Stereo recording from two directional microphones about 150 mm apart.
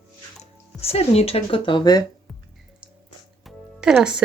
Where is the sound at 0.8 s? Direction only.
40° left (ahead or behind).